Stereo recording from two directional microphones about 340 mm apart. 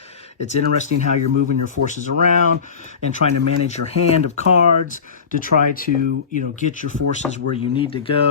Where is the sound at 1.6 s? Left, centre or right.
Left.